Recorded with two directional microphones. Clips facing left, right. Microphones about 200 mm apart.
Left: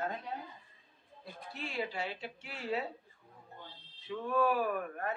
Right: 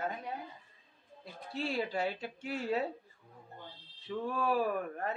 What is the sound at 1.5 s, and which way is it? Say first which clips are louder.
A woman's voice: right 4 dB; 35° right (ahead or behind).